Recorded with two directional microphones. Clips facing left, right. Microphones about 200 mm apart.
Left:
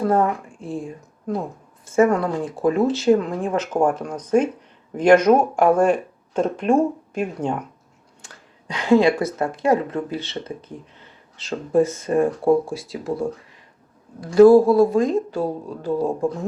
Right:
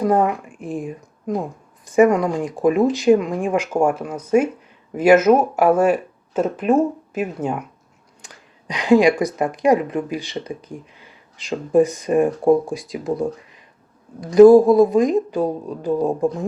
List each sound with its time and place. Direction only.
0.0 s speech: 15° right (ahead or behind)